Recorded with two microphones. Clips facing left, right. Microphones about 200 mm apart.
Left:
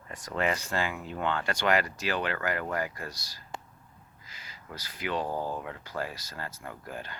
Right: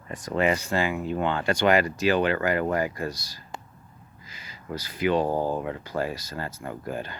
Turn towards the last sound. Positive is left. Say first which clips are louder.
# right 8 dB
turn(degrees=-25)  # may be behind; listen again after turning